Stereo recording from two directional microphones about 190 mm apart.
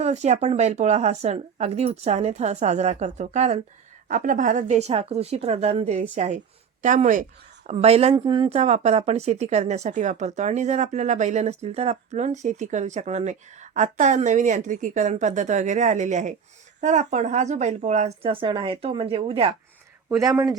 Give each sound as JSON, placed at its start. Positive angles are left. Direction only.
{"t": 0.0, "sound": "speech", "side_deg": -35}
{"t": 20.1, "sound": "speech", "side_deg": -15}